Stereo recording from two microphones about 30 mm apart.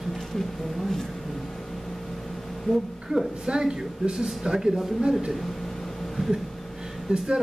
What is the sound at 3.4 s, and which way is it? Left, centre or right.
Speech, right.